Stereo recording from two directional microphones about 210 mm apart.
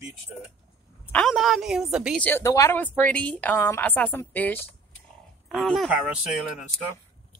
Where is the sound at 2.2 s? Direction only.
10° left (ahead or behind).